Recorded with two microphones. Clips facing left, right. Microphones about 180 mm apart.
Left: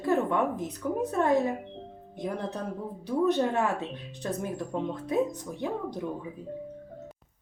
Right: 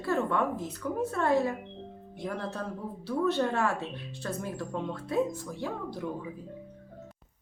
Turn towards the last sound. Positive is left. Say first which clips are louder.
# left 3 dB
turn(degrees=20)  # may be behind; listen again after turning